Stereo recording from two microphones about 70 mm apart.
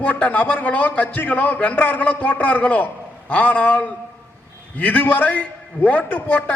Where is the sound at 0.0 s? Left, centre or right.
Left.